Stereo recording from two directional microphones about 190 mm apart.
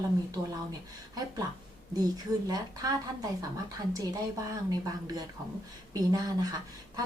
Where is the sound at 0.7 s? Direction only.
20° right (ahead or behind).